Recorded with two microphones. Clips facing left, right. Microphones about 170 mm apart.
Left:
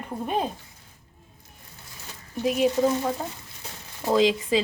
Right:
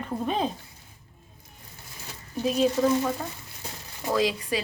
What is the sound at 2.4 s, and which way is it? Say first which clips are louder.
Speech: left 1 dB; 15° left (ahead or behind).